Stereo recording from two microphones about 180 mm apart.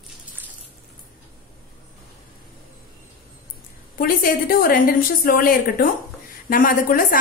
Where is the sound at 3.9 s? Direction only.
50° left (ahead or behind).